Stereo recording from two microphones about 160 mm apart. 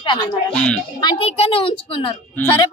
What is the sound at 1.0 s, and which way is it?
A woman's voice, 30° left (ahead or behind).